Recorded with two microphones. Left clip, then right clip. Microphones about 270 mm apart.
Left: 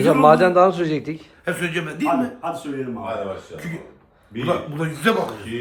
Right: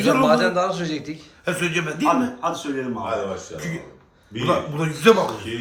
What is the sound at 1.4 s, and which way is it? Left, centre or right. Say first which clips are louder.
Speech: right 1 dB; centre.